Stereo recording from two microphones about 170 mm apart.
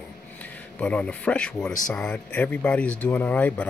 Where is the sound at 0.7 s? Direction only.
10° left (ahead or behind).